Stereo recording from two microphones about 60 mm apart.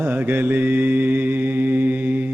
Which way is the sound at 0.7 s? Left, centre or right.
Right.